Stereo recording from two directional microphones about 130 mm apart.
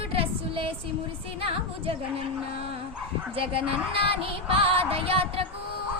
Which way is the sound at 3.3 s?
45° right (ahead or behind).